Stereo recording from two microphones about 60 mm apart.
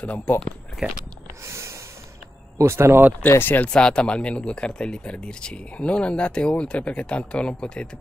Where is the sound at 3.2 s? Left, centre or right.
Left.